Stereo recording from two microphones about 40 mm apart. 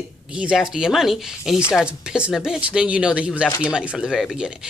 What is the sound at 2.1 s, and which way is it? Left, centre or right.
Speech, right.